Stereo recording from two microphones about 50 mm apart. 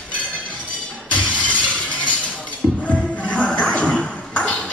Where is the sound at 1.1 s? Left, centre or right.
Left.